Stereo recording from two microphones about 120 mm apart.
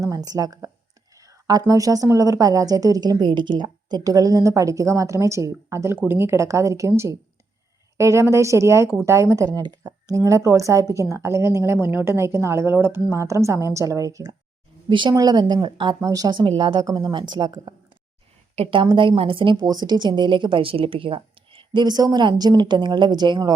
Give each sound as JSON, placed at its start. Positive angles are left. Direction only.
{"t": 0.0, "sound": "a woman's voice", "side_deg": -30}
{"t": 14.8, "sound": "speech", "side_deg": -45}
{"t": 15.1, "sound": "speech", "side_deg": -30}
{"t": 18.5, "sound": "a woman's voice", "side_deg": -50}